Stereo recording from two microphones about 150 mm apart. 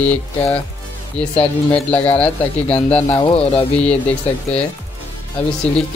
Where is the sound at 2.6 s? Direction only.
40° left (ahead or behind).